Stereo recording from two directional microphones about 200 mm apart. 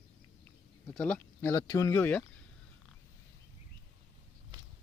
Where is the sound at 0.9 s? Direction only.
5° left (ahead or behind).